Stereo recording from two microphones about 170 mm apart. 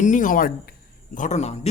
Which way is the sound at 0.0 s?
50° left (ahead or behind).